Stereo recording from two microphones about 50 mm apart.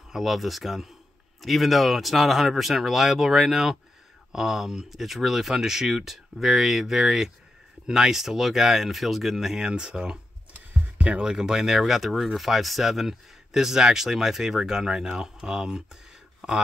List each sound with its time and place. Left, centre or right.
0.1 s speech: centre
9.7 s speech: centre
11.0 s speech: right
11.2 s speech: centre